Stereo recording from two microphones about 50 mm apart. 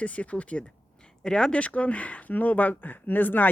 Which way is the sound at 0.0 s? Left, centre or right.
Left.